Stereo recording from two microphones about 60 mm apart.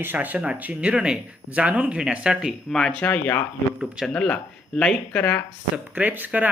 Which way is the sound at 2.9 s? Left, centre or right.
Left.